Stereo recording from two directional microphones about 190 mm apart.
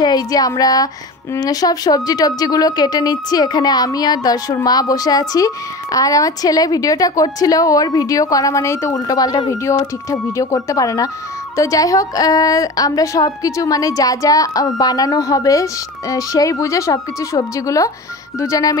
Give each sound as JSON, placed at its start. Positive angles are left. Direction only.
{"t": 0.0, "sound": "a woman's voice", "side_deg": 20}